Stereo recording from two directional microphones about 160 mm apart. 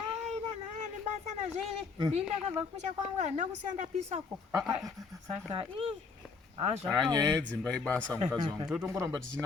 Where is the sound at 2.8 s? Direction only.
45° right (ahead or behind).